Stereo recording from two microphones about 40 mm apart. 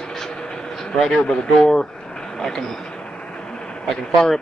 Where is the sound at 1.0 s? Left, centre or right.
Centre.